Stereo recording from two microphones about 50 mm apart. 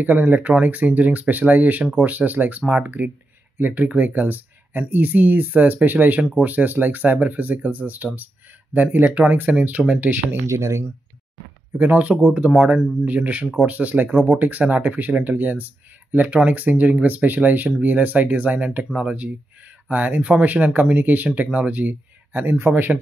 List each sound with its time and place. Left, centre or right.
0.0 s speech: right
9.1 s speech: right
10.4 s speech: right
11.8 s speech: right
12.4 s speech: centre
14.1 s speech: centre
14.4 s speech: right
16.3 s speech: right
18.9 s speech: right
19.9 s speech: right